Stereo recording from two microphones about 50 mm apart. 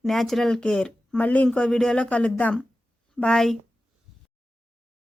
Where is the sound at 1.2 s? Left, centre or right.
Left.